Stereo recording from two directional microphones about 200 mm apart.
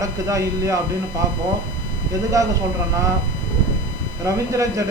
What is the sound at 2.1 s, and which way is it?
Speech, 15° right (ahead or behind).